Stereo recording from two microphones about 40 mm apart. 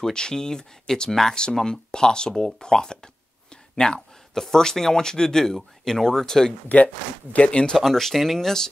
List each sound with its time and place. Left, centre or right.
0.1 s speech: centre
3.7 s a sound: centre
4.4 s speech: centre
6.7 s speech: left
7.7 s speech: centre